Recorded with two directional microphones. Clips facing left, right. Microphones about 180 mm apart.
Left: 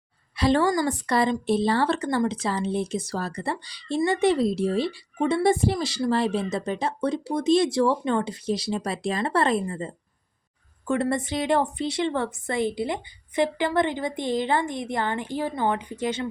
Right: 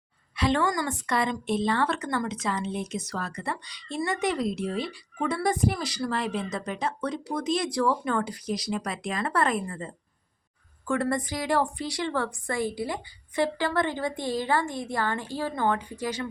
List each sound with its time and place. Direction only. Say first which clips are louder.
0.3 s a woman's voice: left 4 dB; 35° left (ahead or behind)